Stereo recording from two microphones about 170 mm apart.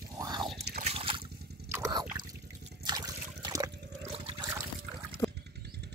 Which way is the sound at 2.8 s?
25° right (ahead or behind).